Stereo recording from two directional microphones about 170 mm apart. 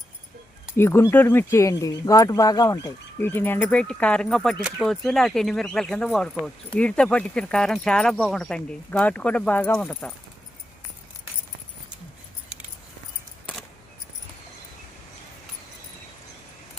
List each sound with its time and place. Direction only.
0.8 s speech: 15° left (ahead or behind)